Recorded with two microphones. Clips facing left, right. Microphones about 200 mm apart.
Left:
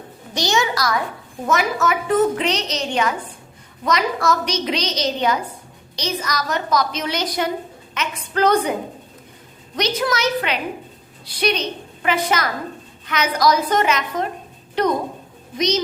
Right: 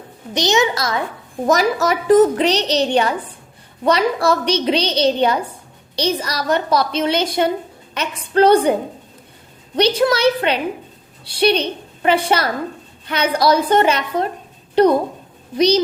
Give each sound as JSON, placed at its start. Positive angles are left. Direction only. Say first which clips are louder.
{"t": 0.3, "sound": "a child's voice", "louder": "right 4 dB", "side_deg": -20}
{"t": 1.5, "sound": "a woman's voice", "louder": "right 4 dB", "side_deg": -35}
{"t": 9.7, "sound": "a woman's voice", "louder": "right 6 dB", "side_deg": -30}